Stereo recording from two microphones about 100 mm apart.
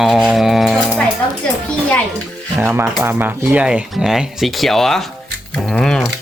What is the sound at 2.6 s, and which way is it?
Speech, 25° right (ahead or behind).